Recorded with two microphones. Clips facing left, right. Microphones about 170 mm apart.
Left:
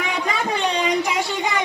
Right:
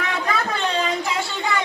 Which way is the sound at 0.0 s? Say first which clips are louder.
Even; 15° left (ahead or behind).